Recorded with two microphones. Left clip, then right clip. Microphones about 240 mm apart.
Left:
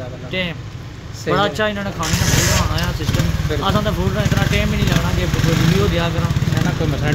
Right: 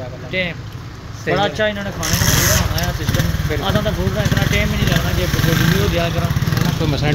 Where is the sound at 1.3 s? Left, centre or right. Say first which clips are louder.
Even; left.